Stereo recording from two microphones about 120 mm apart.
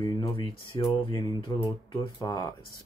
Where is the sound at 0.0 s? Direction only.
40° left (ahead or behind).